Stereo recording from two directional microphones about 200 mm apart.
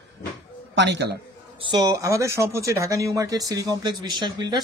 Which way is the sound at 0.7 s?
60° right (ahead or behind).